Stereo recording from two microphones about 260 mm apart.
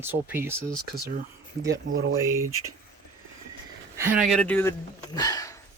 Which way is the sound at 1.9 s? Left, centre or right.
Right.